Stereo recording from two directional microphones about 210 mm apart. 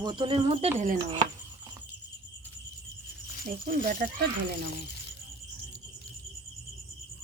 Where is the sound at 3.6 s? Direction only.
40° right (ahead or behind).